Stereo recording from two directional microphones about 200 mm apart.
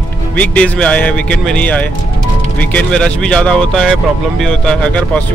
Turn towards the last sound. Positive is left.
turn(degrees=5)  # may be behind; listen again after turning